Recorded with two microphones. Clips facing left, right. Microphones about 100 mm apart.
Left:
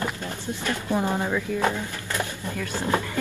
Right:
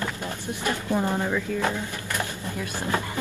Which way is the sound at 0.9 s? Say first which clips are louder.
Left 1 dB; 15° left (ahead or behind).